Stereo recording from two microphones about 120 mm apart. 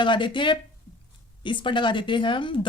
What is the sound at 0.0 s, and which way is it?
Speech, 40° left (ahead or behind).